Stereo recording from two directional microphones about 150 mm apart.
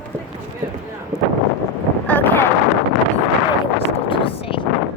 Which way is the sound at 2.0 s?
10° left (ahead or behind).